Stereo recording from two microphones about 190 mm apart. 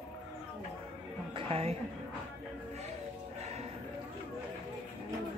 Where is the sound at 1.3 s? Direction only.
30° right (ahead or behind).